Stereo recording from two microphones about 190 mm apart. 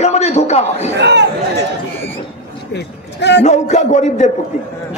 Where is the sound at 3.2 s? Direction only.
65° left (ahead or behind).